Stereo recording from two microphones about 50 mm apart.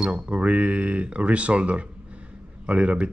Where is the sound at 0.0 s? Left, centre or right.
Right.